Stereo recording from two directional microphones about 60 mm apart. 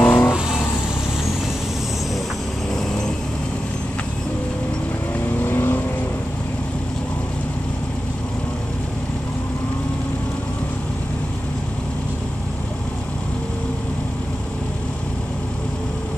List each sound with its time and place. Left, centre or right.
0.0 s vehicle: left
5.4 s vehicle: left